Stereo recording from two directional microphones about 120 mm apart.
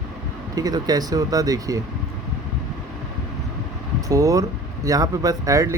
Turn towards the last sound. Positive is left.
turn(degrees=-30)  # may be behind; listen again after turning